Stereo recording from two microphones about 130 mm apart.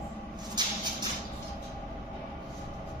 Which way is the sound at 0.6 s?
35° right (ahead or behind).